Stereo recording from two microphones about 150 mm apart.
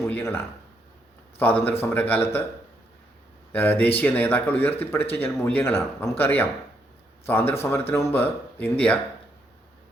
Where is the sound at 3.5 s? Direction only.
10° left (ahead or behind).